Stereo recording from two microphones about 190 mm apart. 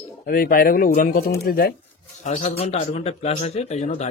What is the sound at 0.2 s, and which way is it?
Speech, 50° left (ahead or behind).